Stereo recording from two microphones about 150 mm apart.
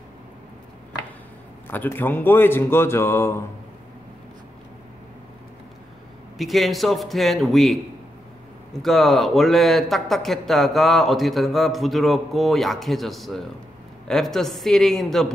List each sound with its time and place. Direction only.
1.7 s speech: 15° left (ahead or behind)
6.3 s speech: centre (ahead or behind)
8.8 s speech: centre (ahead or behind)